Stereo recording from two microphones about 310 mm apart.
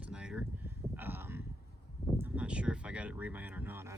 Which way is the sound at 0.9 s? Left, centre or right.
Centre.